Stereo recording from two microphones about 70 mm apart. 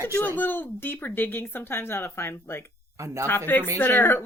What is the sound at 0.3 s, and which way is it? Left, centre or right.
Speech, left.